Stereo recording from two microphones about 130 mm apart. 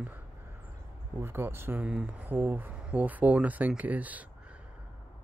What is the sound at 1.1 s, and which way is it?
Speech, 20° right (ahead or behind).